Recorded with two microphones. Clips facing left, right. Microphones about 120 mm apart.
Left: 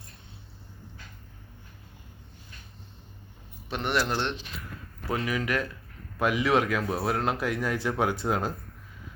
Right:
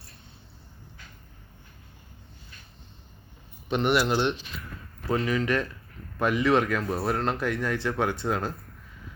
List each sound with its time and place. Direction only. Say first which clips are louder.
3.7 s speech: right 4 dB; centre (ahead or behind)
5.0 s speech: right 3 dB; 10° left (ahead or behind)